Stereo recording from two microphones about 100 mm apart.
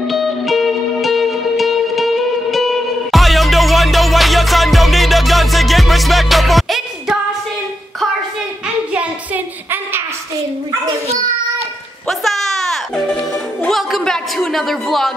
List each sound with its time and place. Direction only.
0.0 s music: centre (ahead or behind)
8.9 s a sound: 15° right (ahead or behind)
12.1 s music: centre (ahead or behind)
13.7 s speech: centre (ahead or behind)